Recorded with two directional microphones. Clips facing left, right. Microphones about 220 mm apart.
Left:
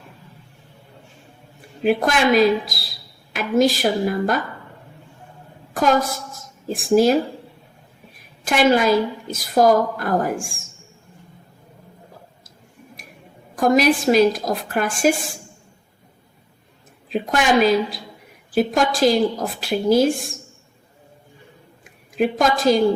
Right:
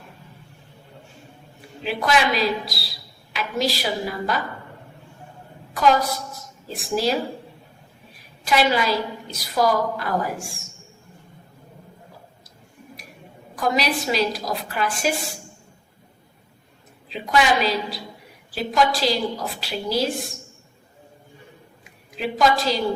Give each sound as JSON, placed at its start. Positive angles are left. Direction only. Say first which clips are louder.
{"t": 1.8, "sound": "a woman's voice", "louder": "left 4 dB", "side_deg": 50}
{"t": 5.7, "sound": "a woman's voice", "louder": "left 1 dB", "side_deg": 50}
{"t": 8.4, "sound": "a woman's voice", "louder": "left 4 dB", "side_deg": 50}
{"t": 13.6, "sound": "a woman's voice", "louder": "left 7 dB", "side_deg": 50}
{"t": 17.1, "sound": "a woman's voice", "louder": "left 2 dB", "side_deg": 50}
{"t": 22.1, "sound": "a woman's voice", "louder": "left 2 dB", "side_deg": 50}